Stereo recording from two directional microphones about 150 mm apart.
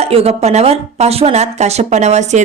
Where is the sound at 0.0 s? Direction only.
40° right (ahead or behind).